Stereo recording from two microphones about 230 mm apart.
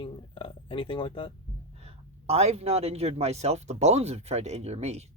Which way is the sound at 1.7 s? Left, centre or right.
Right.